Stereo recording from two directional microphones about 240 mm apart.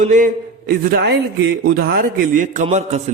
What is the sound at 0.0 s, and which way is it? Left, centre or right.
A man's voice, right.